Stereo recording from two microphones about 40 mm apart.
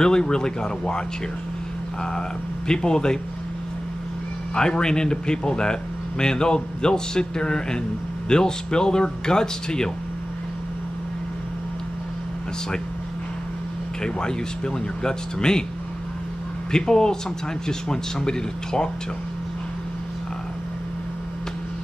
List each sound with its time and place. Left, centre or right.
0.0 s speech: centre
2.7 s speech: centre
4.6 s speech: centre
14.0 s speech: centre
16.7 s speech: centre